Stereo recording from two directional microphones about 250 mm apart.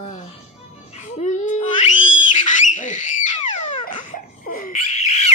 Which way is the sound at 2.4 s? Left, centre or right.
Left.